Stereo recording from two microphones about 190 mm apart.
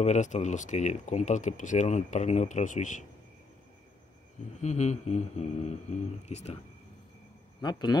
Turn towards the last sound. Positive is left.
turn(degrees=25)  # may be behind; listen again after turning